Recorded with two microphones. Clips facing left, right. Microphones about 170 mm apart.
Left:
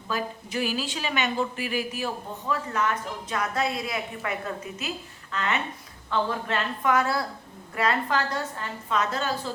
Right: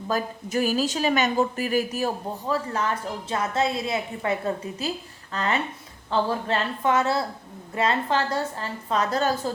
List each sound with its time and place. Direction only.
0.1 s a woman's voice: 45° right (ahead or behind)